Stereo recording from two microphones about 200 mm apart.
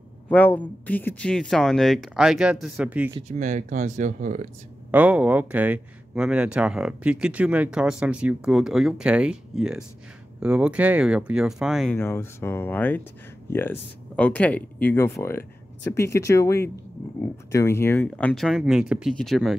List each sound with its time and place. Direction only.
0.3 s speech: 10° left (ahead or behind)
3.3 s speech: 35° right (ahead or behind)
4.9 s speech: 5° right (ahead or behind)
11.9 s speech: 10° left (ahead or behind)